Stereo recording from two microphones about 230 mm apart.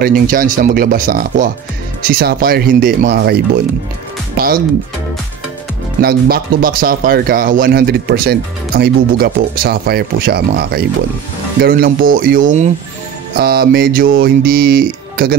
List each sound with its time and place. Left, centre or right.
0.0 s speech: right
5.9 s speech: right